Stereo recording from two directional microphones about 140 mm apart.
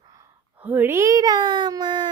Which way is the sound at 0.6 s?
15° right (ahead or behind).